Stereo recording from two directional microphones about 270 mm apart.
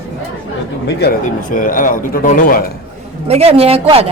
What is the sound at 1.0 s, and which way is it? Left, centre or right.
A man's voice, left.